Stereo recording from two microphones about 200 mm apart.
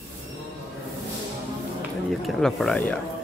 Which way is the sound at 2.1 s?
Centre (ahead or behind).